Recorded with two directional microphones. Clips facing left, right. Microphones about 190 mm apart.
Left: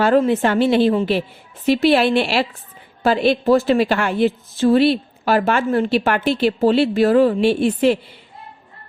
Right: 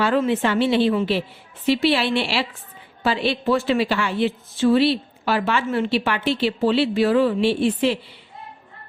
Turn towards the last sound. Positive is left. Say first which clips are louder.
# left 4 dB
turn(degrees=45)  # may be behind; listen again after turning